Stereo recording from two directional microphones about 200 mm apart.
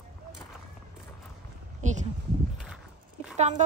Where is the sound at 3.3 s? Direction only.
35° right (ahead or behind).